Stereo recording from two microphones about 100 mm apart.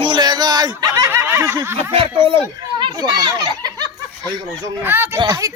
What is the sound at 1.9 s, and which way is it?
Speech, 70° right (ahead or behind).